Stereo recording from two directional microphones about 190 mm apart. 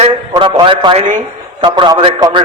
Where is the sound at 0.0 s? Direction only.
25° right (ahead or behind).